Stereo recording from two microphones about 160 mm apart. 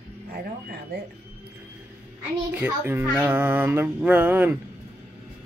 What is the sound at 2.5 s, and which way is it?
A child's voice, 10° right (ahead or behind).